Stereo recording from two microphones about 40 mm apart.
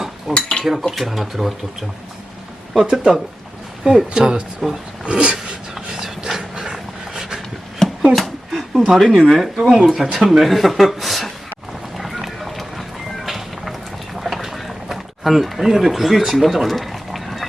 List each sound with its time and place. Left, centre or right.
0.3 s cutlery: left
0.6 s dishes: centre
0.9 s speech: centre
2.9 s speech: centre; by 5.5 s right
5.7 s clip-clop: centre
8.1 s a sound: centre
8.9 s speech: centre
9.6 s speech: centre
9.8 s speech: centre
11.9 s run: centre
13.2 s a sound: centre